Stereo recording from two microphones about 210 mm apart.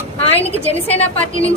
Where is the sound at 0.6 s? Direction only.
30° left (ahead or behind).